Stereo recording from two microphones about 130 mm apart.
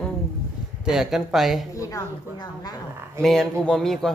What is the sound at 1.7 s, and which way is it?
A woman's voice, 25° left (ahead or behind).